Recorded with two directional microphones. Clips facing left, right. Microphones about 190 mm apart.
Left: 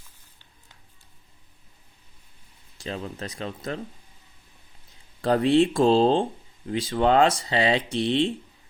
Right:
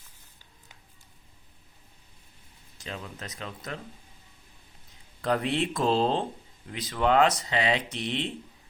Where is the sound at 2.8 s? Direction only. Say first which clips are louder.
Left 6 dB; 35° left (ahead or behind).